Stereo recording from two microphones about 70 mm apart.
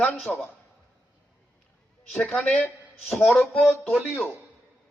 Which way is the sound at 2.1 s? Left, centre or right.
Left.